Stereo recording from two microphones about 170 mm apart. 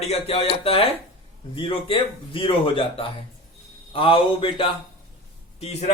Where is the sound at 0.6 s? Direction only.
35° left (ahead or behind).